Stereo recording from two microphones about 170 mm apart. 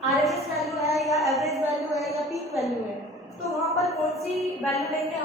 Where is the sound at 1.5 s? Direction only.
20° left (ahead or behind).